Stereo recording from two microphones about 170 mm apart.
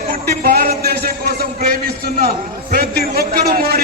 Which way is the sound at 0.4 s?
60° right (ahead or behind).